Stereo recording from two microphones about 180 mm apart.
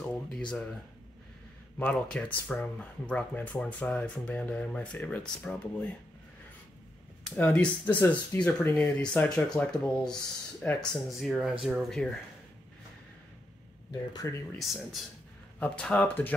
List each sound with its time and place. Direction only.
1.8 s speech: 5° left (ahead or behind)
7.2 s speech: 10° left (ahead or behind)
14.1 s speech: 15° left (ahead or behind)
14.6 s speech: centre (ahead or behind)